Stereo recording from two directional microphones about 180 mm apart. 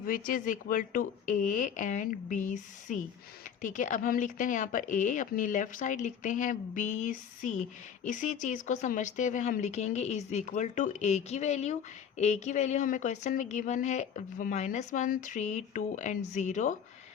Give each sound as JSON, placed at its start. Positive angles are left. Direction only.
{"t": 0.0, "sound": "speech", "side_deg": 50}